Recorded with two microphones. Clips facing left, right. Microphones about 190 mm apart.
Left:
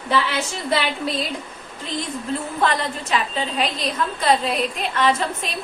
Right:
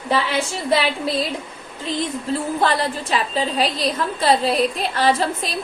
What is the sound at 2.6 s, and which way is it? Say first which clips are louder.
A woman's voice: left 1 dB; 35° right (ahead or behind).